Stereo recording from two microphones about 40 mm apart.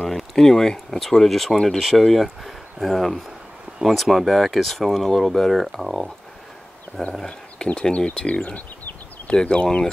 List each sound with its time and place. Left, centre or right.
0.0 s speech: centre
7.2 s speech: left